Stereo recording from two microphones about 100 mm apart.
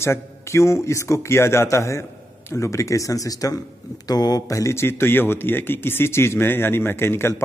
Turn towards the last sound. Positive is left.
turn(degrees=25)  # may be behind; listen again after turning